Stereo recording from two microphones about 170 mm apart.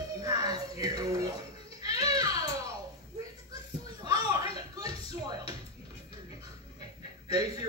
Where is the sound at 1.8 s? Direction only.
25° right (ahead or behind).